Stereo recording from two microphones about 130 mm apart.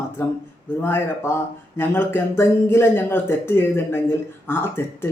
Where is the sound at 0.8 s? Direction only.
15° left (ahead or behind).